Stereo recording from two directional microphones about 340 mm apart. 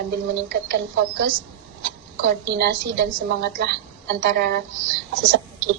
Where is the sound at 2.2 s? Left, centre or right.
Right.